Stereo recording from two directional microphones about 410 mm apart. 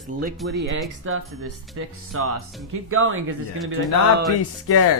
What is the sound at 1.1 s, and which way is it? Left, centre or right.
Speech, right.